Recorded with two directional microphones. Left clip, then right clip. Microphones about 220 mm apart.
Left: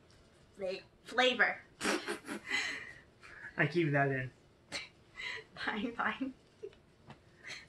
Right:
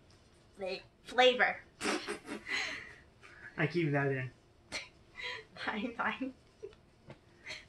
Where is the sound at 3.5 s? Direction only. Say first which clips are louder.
Left 1 dB; 20° left (ahead or behind).